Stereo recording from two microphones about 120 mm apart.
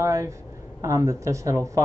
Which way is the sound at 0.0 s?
25° right (ahead or behind).